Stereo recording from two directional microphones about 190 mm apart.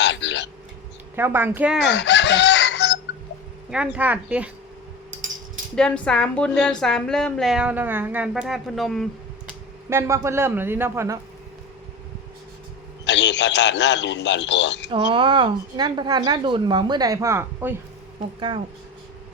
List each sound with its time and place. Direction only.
0.0 s a sound: 70° left (ahead or behind)
1.1 s speech: 10° right (ahead or behind)
1.8 s chicken: 65° left (ahead or behind)
3.7 s speech: 5° right (ahead or behind)
5.7 s a woman's voice: 5° left (ahead or behind)
9.9 s speech: 15° right (ahead or behind)
13.1 s a man's voice: 65° left (ahead or behind)
14.8 s speech: 30° right (ahead or behind); by 17.7 s 10° right (ahead or behind)
18.3 s speech: 25° right (ahead or behind)